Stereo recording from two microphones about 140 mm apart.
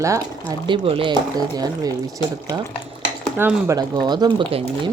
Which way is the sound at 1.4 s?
30° right (ahead or behind).